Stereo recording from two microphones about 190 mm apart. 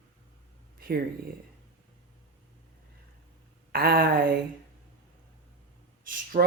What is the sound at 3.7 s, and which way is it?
Speech, 55° right (ahead or behind).